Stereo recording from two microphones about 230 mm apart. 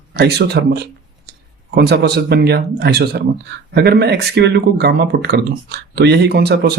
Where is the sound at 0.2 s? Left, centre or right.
Right.